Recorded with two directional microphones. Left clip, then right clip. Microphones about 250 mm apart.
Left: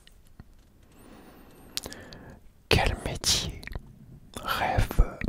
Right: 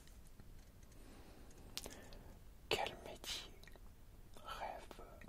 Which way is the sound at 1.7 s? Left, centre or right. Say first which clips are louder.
Left 14 dB; left.